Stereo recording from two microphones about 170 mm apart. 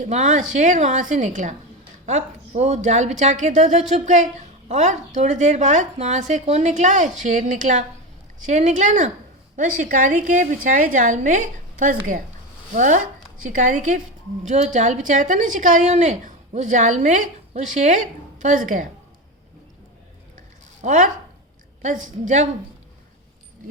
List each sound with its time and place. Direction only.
0.0 s a woman's voice: 45° right (ahead or behind)
20.8 s a woman's voice: 45° right (ahead or behind)